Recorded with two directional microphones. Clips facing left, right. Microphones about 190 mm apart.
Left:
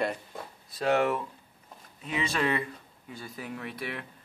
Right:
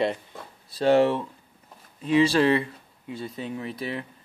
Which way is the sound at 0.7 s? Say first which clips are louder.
Right 6 dB; 30° right (ahead or behind).